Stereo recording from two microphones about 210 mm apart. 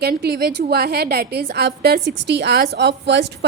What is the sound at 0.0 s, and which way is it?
A woman's voice, 50° right (ahead or behind).